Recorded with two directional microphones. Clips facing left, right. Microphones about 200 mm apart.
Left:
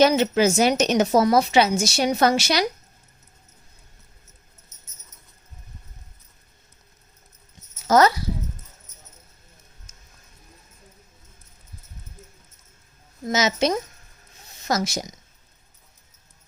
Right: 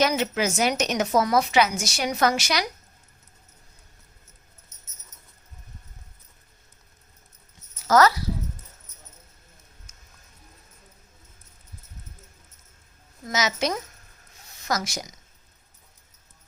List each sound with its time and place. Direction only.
0.0 s a woman's voice: 30° left (ahead or behind)
7.9 s speech: 20° left (ahead or behind)
13.2 s a woman's voice: 25° left (ahead or behind)